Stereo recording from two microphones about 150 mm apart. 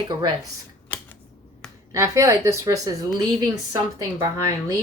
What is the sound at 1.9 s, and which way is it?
A woman's voice, 20° right (ahead or behind).